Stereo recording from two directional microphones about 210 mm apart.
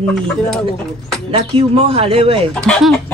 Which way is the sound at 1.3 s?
25° right (ahead or behind).